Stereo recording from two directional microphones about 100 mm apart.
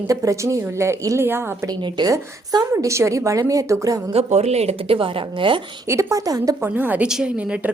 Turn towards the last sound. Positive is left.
turn(degrees=-10)  # may be behind; listen again after turning